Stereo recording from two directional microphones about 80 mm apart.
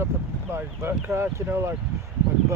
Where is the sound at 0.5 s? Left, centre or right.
Right.